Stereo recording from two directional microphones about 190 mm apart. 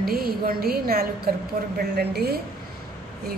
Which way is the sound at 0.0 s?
50° right (ahead or behind).